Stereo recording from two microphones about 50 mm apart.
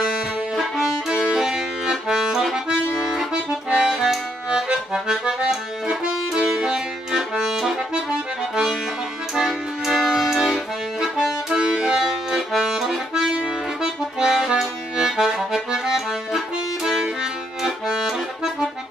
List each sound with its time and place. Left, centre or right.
0.6 s violin: centre
1.3 s accordion: centre
6.5 s music: centre
7.9 s accordion: centre